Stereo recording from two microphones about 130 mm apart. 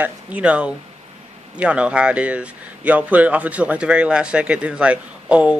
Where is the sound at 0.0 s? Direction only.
10° right (ahead or behind).